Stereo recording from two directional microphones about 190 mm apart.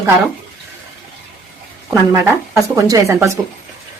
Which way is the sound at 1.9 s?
15° right (ahead or behind).